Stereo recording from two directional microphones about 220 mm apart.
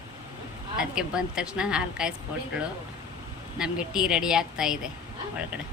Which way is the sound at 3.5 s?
5° right (ahead or behind).